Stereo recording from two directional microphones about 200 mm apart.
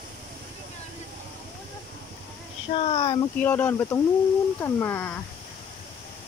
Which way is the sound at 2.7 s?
30° left (ahead or behind).